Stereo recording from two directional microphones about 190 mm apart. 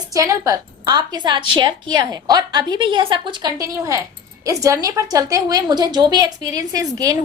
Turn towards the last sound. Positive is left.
turn(degrees=-20)  # may be behind; listen again after turning